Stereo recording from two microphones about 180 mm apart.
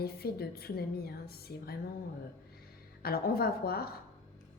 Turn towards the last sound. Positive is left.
turn(degrees=55)  # may be behind; listen again after turning